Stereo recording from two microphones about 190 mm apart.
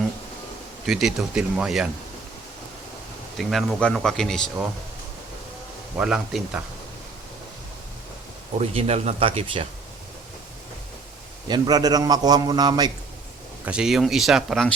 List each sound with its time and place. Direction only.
0.9 s speech: centre (ahead or behind)
3.3 s speech: centre (ahead or behind)
6.0 s speech: 5° right (ahead or behind)
8.5 s speech: 30° right (ahead or behind)
11.4 s a man's voice: 25° right (ahead or behind)
13.7 s speech: 5° right (ahead or behind)